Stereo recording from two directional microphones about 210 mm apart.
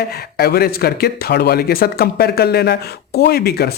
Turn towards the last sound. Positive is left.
turn(degrees=50)  # may be behind; listen again after turning